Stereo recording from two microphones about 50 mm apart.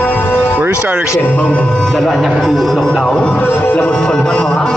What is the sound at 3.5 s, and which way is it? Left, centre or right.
Music, left.